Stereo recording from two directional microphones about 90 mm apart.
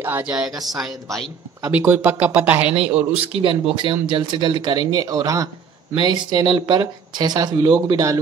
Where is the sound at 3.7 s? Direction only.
65° right (ahead or behind); by 5.5 s 40° right (ahead or behind).